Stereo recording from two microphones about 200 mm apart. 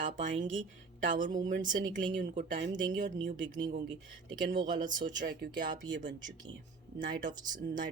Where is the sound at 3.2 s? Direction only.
70° right (ahead or behind).